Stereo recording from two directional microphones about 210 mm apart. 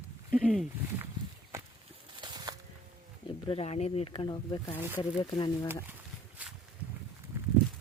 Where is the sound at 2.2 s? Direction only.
20° right (ahead or behind).